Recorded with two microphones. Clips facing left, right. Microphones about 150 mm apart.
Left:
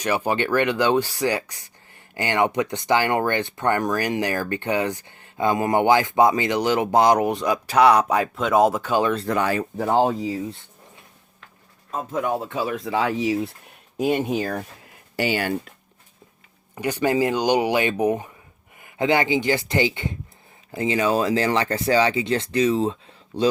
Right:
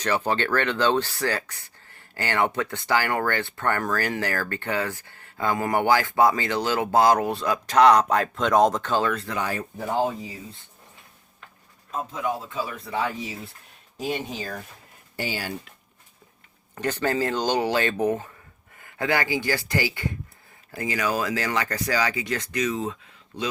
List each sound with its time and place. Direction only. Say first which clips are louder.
0.0 s speech: left 2 dB; 10° left (ahead or behind)
9.1 s speech: left 7 dB; 40° left (ahead or behind)
9.4 s speech: left 6 dB; 90° left
11.9 s speech: left 4 dB; 55° left (ahead or behind); by 13.5 s 75° left (ahead or behind)
13.9 s speech: left 8 dB; 60° left (ahead or behind)
15.1 s speech: left 7 dB; 70° left (ahead or behind)
16.7 s speech: left 4 dB; 10° left (ahead or behind); by 23.5 s 30° left (ahead or behind)